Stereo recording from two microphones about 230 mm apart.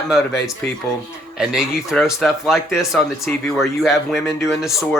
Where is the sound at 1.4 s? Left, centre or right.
Centre.